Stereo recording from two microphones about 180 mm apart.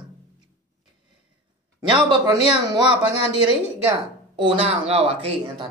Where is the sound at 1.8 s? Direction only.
25° right (ahead or behind).